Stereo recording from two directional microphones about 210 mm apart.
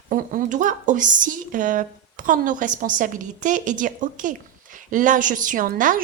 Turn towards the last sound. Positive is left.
turn(degrees=-40)  # may be behind; listen again after turning